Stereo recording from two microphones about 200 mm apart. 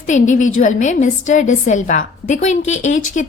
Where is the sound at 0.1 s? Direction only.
40° left (ahead or behind).